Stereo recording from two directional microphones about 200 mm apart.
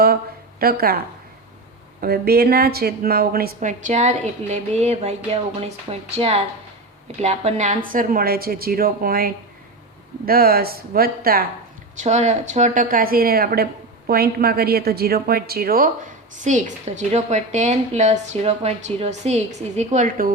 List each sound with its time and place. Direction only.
0.6 s a woman's voice: 50° right (ahead or behind)
2.0 s a woman's voice: 50° right (ahead or behind)
11.9 s a woman's voice: 35° right (ahead or behind)